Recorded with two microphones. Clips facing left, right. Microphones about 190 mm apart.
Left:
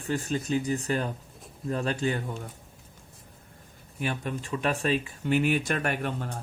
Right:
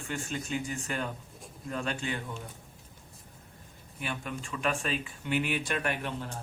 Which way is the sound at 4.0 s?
40° left (ahead or behind).